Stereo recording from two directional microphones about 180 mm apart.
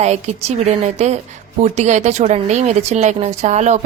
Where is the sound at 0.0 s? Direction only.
35° right (ahead or behind).